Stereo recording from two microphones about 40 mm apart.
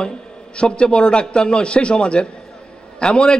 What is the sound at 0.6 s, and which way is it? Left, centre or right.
A man's voice, left.